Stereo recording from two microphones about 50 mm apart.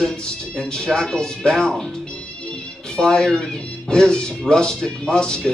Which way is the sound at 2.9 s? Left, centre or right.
Centre.